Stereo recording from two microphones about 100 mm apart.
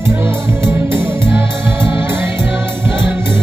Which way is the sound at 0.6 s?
25° right (ahead or behind).